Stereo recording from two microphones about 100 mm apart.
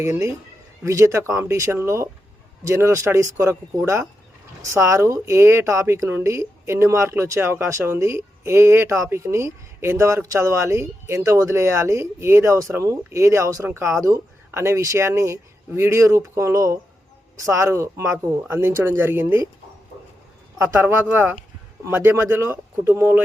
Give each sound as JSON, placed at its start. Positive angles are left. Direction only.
{"t": 0.0, "sound": "speech", "side_deg": -30}
{"t": 4.6, "sound": "speech", "side_deg": -30}
{"t": 20.7, "sound": "speech", "side_deg": -20}